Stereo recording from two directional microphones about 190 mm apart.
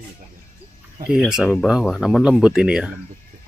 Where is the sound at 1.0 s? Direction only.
5° right (ahead or behind).